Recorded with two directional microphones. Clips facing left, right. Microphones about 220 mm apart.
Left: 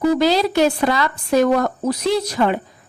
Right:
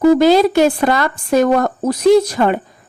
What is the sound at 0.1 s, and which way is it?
Speech, 50° right (ahead or behind).